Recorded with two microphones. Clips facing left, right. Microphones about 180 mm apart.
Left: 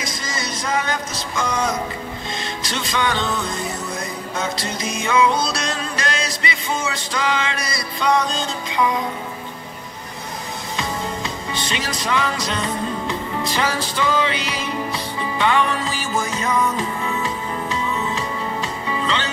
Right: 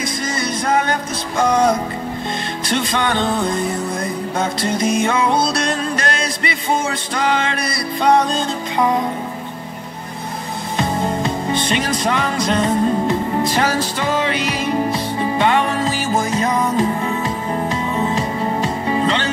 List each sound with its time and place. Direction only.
0.0 s music: 55° right (ahead or behind)
10.8 s music: 50° right (ahead or behind)